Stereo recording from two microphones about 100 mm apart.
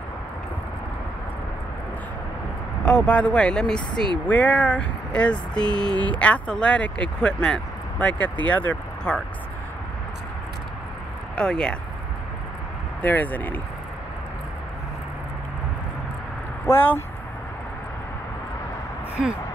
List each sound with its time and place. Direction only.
2.8 s speech: 10° left (ahead or behind)
11.3 s speech: 5° left (ahead or behind)
13.0 s speech: 15° left (ahead or behind)
16.6 s speech: 20° left (ahead or behind)
19.2 s speech: 10° right (ahead or behind)